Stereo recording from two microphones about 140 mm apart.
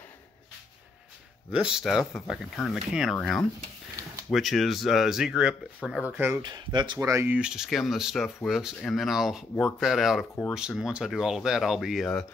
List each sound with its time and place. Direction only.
1.5 s speech: 5° right (ahead or behind)
6.4 s speech: 30° right (ahead or behind)
7.0 s speech: 20° right (ahead or behind); by 12.3 s centre (ahead or behind)